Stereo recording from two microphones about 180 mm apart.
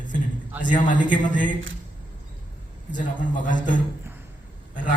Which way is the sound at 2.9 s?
45° left (ahead or behind).